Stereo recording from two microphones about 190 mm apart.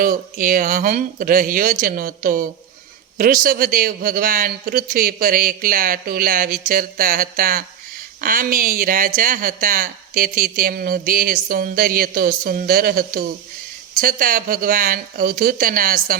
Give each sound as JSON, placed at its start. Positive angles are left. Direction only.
{"t": 0.0, "sound": "speech", "side_deg": -45}